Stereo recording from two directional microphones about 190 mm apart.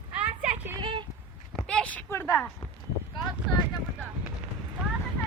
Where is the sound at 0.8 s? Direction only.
25° right (ahead or behind).